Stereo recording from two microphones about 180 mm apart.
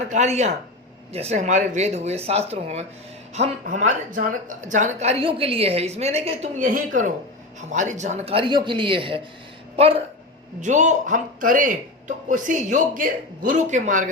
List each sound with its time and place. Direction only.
0.1 s a woman's voice: 40° right (ahead or behind)
10.6 s a man's voice: 40° right (ahead or behind)